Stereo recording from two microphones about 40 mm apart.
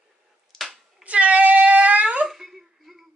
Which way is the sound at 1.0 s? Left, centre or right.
Right.